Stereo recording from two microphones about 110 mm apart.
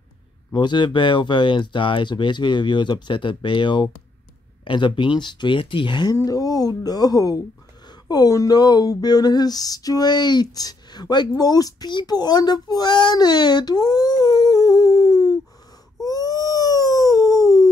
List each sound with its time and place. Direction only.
0.5 s speech: 45° left (ahead or behind)
6.1 s speech: 30° left (ahead or behind)
16.0 s dog: 35° left (ahead or behind)